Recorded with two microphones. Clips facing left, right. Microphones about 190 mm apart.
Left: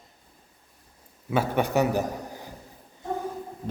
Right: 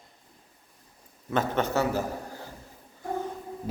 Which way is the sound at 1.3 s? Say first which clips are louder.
Left 2 dB; 10° left (ahead or behind).